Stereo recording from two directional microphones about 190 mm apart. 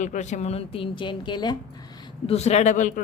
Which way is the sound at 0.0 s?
40° left (ahead or behind).